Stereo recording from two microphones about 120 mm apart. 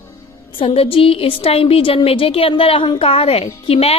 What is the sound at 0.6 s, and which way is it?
A woman's voice, 55° left (ahead or behind).